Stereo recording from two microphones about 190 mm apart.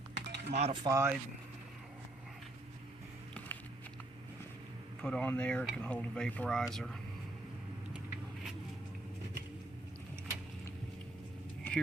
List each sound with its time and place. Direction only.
0.3 s typing: 60° right (ahead or behind)
0.5 s speech: 35° right (ahead or behind)
0.9 s speech: 15° right (ahead or behind)
5.0 s speech: 5° left (ahead or behind)
11.6 s a sound: 10° left (ahead or behind)